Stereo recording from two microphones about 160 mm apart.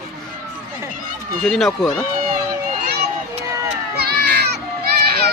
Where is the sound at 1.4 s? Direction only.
Centre (ahead or behind).